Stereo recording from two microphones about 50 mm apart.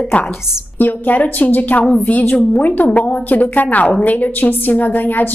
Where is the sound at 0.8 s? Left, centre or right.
Left.